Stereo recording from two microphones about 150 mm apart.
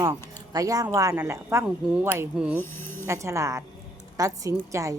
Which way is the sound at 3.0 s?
20° right (ahead or behind).